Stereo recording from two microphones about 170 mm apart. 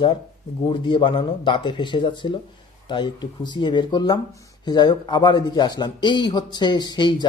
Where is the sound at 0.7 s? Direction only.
30° left (ahead or behind).